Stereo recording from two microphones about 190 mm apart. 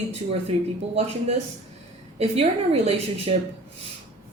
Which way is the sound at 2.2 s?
30° right (ahead or behind).